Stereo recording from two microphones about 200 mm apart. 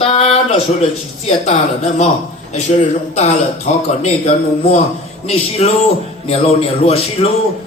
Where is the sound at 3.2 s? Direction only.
35° left (ahead or behind).